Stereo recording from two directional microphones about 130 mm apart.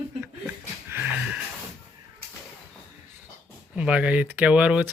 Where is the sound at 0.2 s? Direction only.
20° right (ahead or behind).